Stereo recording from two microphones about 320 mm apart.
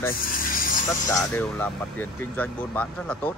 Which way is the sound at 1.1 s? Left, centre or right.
Centre.